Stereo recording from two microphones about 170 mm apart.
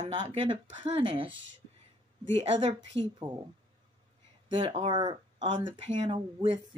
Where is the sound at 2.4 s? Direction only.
40° right (ahead or behind).